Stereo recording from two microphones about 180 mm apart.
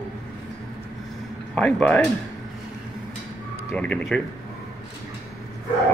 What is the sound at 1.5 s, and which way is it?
Speech, 5° left (ahead or behind).